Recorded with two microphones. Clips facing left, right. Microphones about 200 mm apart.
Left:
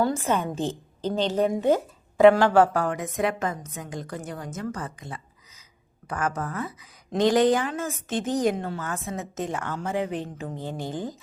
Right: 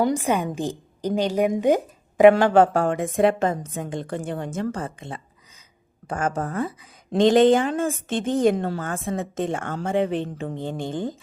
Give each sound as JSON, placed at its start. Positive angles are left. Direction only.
{"t": 0.0, "sound": "a woman's voice", "side_deg": -15}